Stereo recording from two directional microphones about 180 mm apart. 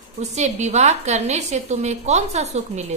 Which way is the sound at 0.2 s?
40° right (ahead or behind).